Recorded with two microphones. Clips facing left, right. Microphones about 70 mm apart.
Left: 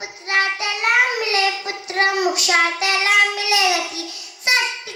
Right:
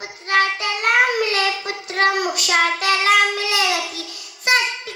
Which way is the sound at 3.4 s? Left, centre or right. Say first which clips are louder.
Left 2 dB; right.